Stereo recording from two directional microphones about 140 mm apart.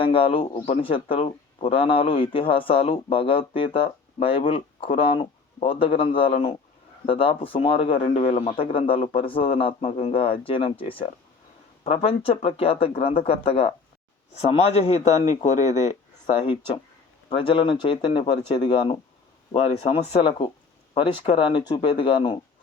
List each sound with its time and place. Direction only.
0.0 s a man's voice: 40° left (ahead or behind)
8.4 s a man's voice: 40° left (ahead or behind); by 16.5 s 55° left (ahead or behind)
17.2 s speech: 40° left (ahead or behind)
19.5 s a man's voice: 45° left (ahead or behind)